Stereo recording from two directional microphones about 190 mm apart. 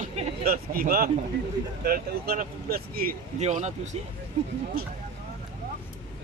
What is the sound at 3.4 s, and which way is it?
Speech, 35° right (ahead or behind).